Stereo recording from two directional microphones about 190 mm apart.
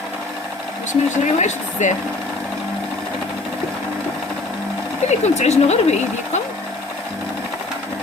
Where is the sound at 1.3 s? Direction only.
40° left (ahead or behind).